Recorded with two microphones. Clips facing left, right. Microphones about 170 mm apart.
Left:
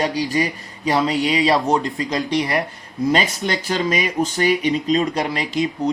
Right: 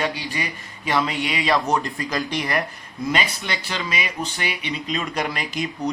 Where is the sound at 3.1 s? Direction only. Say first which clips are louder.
Left 4 dB; 40° left (ahead or behind); by 5.7 s 25° left (ahead or behind).